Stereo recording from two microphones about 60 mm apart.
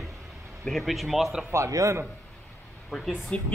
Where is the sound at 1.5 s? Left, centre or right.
Right.